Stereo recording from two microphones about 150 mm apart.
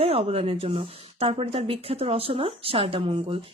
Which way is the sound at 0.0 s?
40° right (ahead or behind).